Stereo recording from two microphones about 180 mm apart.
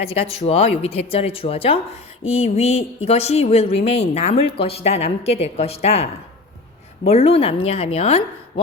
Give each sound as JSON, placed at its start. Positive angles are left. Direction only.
{"t": 0.0, "sound": "speech", "side_deg": 35}